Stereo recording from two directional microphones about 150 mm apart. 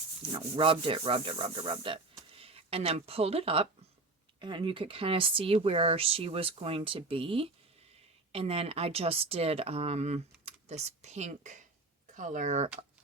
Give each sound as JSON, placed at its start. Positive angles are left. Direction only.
{"t": 0.3, "sound": "speech", "side_deg": -35}